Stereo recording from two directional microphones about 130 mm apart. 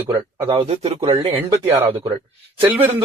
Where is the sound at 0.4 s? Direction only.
50° right (ahead or behind).